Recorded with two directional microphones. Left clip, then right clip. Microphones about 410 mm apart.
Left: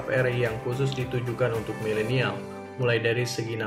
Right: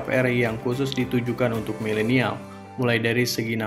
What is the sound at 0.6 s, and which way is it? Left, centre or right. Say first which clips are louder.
Speech: right 4 dB; centre.